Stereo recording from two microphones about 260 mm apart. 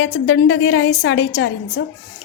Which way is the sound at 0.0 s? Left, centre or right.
Left.